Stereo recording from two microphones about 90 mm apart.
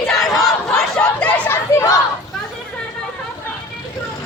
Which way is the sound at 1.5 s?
30° left (ahead or behind).